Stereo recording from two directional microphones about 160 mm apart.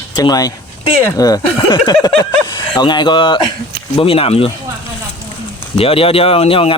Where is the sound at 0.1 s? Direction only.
25° left (ahead or behind).